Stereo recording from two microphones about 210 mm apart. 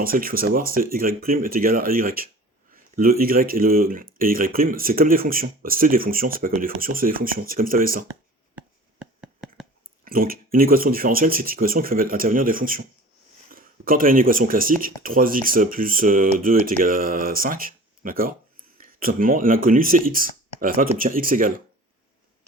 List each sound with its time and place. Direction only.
0.0 s speech: 45° right (ahead or behind)
8.5 s a sound: 5° right (ahead or behind)
10.0 s speech: 45° right (ahead or behind)